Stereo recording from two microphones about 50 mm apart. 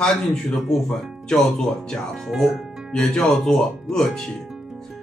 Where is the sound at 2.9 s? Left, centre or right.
Centre.